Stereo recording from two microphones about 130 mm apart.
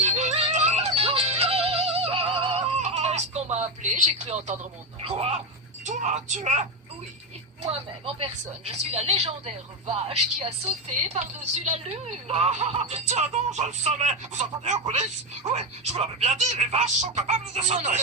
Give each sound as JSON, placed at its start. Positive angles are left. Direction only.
{"t": 0.0, "sound": "music", "side_deg": -65}
{"t": 3.9, "sound": "a woman's voice", "side_deg": -65}
{"t": 5.0, "sound": "speech", "side_deg": -50}
{"t": 5.8, "sound": "speech", "side_deg": -65}
{"t": 7.6, "sound": "a woman's voice", "side_deg": -50}